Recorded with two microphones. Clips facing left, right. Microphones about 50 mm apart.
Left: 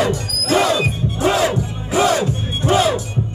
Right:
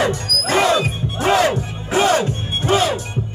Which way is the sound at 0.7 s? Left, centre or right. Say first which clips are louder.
Even; right.